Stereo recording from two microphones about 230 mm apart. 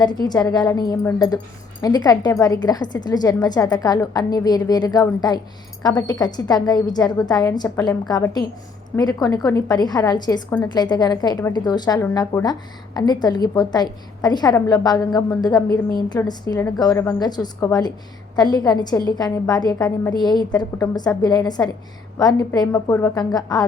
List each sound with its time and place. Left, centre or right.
0.0 s a woman's voice: centre